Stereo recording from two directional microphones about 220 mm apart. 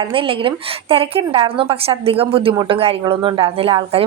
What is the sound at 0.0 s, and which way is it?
A woman's voice, 25° right (ahead or behind).